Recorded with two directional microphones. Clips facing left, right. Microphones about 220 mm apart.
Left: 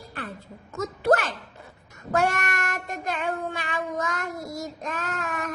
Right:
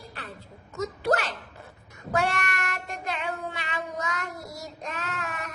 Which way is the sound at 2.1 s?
45° left (ahead or behind).